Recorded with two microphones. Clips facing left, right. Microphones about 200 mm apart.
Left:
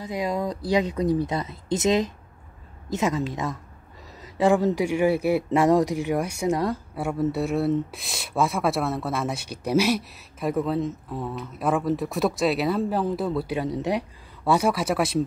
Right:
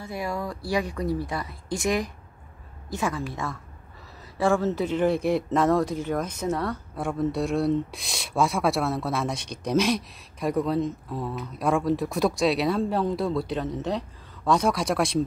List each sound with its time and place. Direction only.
0.0 s speech: 20° left (ahead or behind)